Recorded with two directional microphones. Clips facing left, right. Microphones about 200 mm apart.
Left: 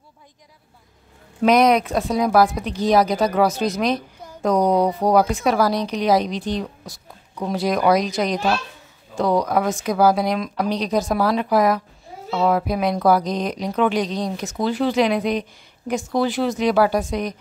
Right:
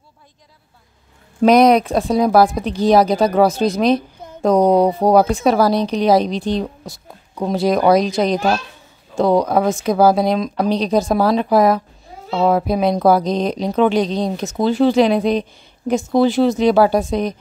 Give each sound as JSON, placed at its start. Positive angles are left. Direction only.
{"t": 1.4, "sound": "a woman's voice", "side_deg": -35}